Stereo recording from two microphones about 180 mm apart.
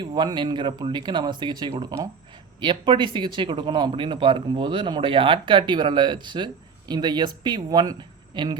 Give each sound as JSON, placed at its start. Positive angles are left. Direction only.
{"t": 0.0, "sound": "speech", "side_deg": -25}